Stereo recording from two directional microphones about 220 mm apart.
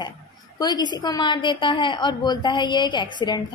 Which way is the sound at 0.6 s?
20° left (ahead or behind).